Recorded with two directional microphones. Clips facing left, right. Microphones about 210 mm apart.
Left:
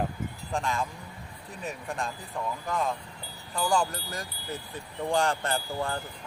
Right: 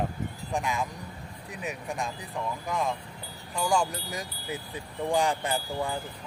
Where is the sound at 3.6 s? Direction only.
Centre (ahead or behind).